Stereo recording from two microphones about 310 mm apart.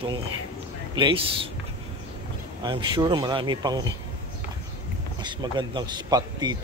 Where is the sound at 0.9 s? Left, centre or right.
Centre.